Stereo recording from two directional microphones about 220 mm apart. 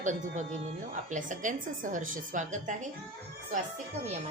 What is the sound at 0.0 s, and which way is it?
A woman's voice, 35° right (ahead or behind).